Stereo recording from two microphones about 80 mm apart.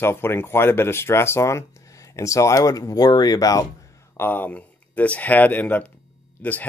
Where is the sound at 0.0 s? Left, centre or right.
Left.